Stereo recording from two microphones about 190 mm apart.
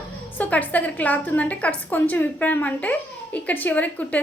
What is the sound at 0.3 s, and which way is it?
Speech, 10° left (ahead or behind).